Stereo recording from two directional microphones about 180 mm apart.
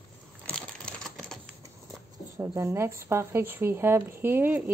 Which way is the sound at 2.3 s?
15° right (ahead or behind).